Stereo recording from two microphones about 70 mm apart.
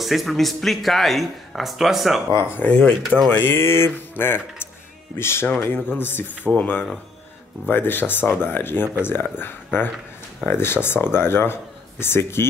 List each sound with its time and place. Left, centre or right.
0.0 s speech: centre
2.6 s speech: left
3.3 s speech: left